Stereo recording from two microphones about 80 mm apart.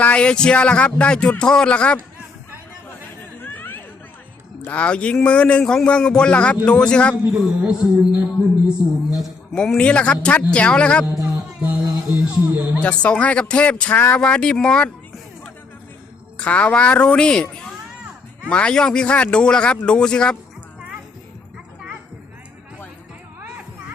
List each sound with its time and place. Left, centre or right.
0.0 s a man's voice: centre
3.4 s chatter: left
4.6 s a man's voice: centre
7.4 s a sound: centre
9.6 s a man's voice: centre
11.6 s speech: centre
12.8 s a man's voice: centre
16.4 s a man's voice: centre